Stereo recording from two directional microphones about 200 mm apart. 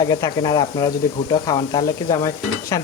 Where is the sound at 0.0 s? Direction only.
20° left (ahead or behind).